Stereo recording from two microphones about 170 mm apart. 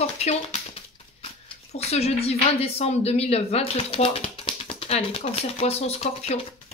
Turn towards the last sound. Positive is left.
turn(degrees=35)  # may be behind; listen again after turning